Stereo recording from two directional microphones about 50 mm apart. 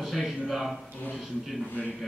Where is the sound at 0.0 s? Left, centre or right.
Centre.